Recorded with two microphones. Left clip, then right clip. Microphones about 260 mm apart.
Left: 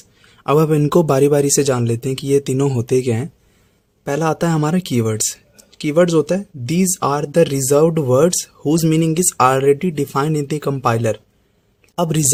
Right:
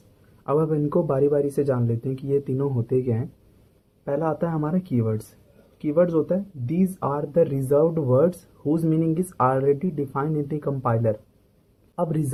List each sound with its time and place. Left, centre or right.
0.4 s speech: left